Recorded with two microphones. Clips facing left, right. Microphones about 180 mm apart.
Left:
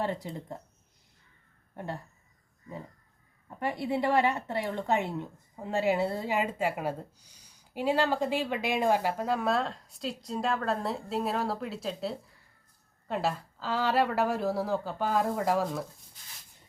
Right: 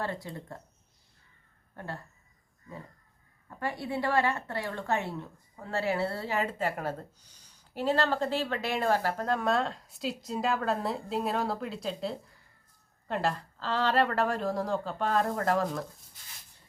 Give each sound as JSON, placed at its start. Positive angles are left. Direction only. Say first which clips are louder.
{"t": 0.0, "sound": "speech", "louder": "left 3 dB", "side_deg": 20}
{"t": 1.7, "sound": "speech", "louder": "left 3 dB", "side_deg": 15}
{"t": 3.5, "sound": "speech", "louder": "left 3 dB", "side_deg": 20}